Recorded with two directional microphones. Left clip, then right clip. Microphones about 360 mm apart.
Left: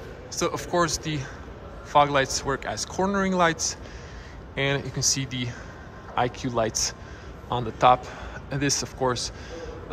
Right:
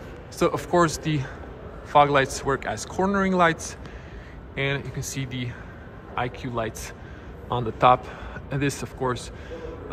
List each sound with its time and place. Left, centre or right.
0.3 s a man's voice: centre